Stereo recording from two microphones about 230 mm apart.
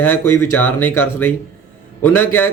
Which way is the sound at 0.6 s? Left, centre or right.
Centre.